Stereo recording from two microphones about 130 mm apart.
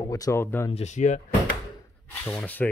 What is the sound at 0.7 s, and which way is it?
Speech, 60° left (ahead or behind).